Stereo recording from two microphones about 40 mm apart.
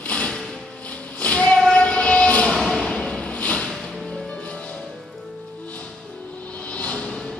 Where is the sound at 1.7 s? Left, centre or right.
Left.